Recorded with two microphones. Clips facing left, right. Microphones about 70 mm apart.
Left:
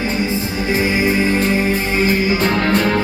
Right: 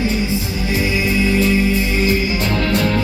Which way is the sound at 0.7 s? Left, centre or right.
Left.